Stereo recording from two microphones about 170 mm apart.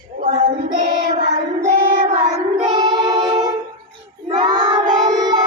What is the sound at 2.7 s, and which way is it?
Music, 25° right (ahead or behind).